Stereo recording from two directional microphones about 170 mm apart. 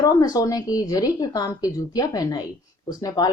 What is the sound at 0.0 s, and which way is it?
Speech, 20° left (ahead or behind).